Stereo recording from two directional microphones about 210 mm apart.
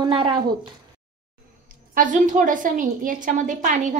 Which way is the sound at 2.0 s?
40° right (ahead or behind).